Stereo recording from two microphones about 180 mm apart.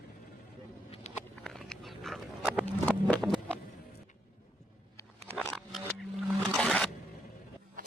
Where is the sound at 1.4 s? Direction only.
Centre (ahead or behind).